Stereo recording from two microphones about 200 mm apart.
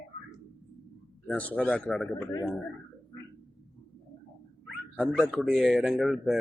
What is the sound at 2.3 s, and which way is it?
Speech, 20° left (ahead or behind).